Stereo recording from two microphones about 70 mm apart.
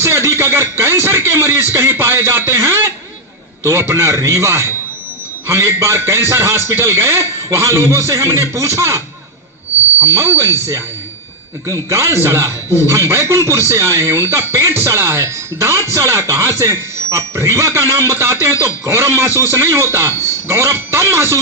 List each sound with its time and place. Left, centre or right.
0.0 s speech: right
10.2 s speech: right